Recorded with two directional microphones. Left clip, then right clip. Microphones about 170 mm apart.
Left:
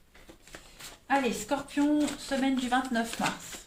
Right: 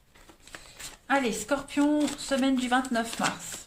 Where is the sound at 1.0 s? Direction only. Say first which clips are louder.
Right 1 dB; 45° right (ahead or behind).